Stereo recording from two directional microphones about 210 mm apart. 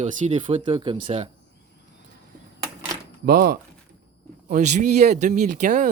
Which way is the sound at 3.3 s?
45° right (ahead or behind).